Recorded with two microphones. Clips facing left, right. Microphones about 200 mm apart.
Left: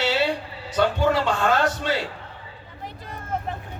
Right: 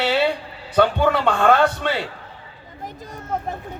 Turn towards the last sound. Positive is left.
turn(degrees=-45)  # may be behind; listen again after turning